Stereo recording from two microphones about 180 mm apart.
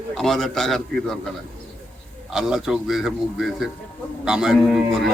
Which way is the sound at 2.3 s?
5° right (ahead or behind).